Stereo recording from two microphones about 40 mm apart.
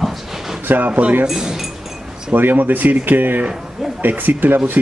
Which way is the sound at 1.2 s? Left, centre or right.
Centre.